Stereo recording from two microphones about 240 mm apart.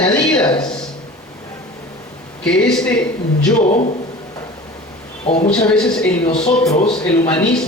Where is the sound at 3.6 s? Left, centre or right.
Left.